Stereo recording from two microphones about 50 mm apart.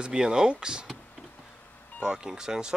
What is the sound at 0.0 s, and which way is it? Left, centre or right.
Speech, centre.